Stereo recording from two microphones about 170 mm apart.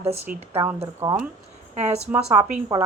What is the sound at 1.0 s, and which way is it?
Speech, 20° right (ahead or behind).